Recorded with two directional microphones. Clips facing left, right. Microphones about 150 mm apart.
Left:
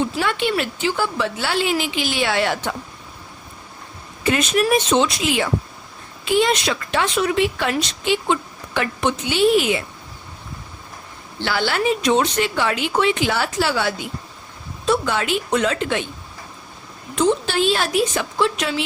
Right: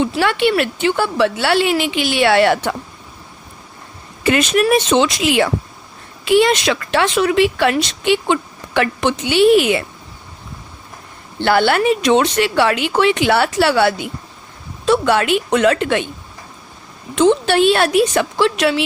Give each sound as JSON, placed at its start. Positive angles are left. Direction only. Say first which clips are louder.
{"t": 0.2, "sound": "speech", "louder": "right 6 dB", "side_deg": -70}
{"t": 4.2, "sound": "speech", "louder": "right 4 dB", "side_deg": -80}
{"t": 11.3, "sound": "speech", "louder": "right 7 dB", "side_deg": -55}
{"t": 17.2, "sound": "speech", "louder": "right 6 dB", "side_deg": -75}